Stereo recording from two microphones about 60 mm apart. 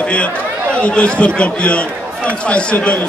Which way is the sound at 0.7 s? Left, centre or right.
Centre.